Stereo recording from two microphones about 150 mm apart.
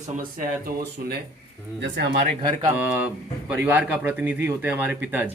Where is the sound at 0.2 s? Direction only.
70° right (ahead or behind).